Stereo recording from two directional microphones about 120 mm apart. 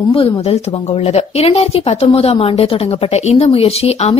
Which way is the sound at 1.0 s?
60° left (ahead or behind).